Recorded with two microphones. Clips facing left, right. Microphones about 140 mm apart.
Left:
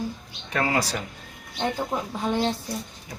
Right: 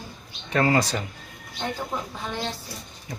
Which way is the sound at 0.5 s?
5° left (ahead or behind).